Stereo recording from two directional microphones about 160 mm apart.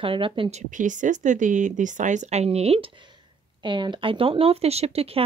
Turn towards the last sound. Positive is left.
turn(degrees=-40)  # may be behind; listen again after turning